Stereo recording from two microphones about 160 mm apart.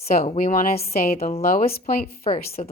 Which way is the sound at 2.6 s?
45° left (ahead or behind).